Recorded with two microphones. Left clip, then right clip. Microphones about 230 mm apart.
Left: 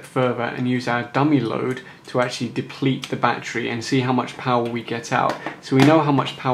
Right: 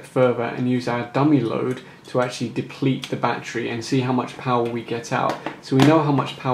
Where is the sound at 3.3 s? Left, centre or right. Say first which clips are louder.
Left 3 dB; centre.